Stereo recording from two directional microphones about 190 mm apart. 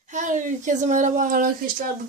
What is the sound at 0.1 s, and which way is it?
Speech, 40° right (ahead or behind).